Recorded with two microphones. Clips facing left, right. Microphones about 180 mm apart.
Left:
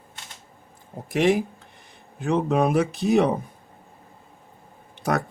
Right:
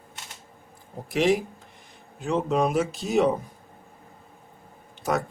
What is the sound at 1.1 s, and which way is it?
Speech, 55° left (ahead or behind).